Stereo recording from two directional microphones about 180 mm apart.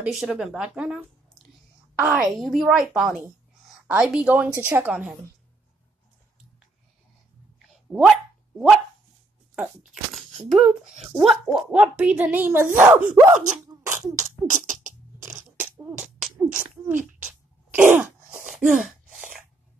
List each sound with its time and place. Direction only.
0.0 s a woman's voice: 5° right (ahead or behind)
7.5 s dog: 5° right (ahead or behind)
10.1 s speech: centre (ahead or behind)
13.7 s a sound: 20° right (ahead or behind)
14.6 s beatboxing: 45° right (ahead or behind)
14.9 s a sound: 15° right (ahead or behind)
16.3 s speech: 10° right (ahead or behind)
17.6 s throat clearing: 10° right (ahead or behind)
18.5 s gasp: centre (ahead or behind)